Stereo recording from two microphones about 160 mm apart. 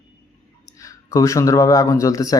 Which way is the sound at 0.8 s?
20° left (ahead or behind).